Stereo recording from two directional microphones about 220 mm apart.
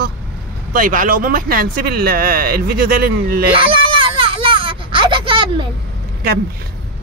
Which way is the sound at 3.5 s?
25° right (ahead or behind).